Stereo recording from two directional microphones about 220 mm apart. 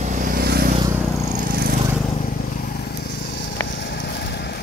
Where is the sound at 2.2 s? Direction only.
40° left (ahead or behind).